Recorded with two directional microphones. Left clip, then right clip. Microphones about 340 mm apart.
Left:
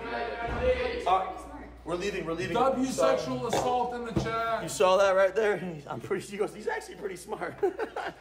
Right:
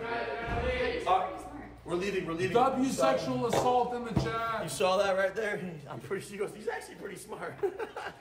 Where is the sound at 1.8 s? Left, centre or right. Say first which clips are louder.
Left 1 dB; centre.